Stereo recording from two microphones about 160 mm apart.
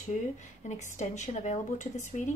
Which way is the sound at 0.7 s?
50° left (ahead or behind).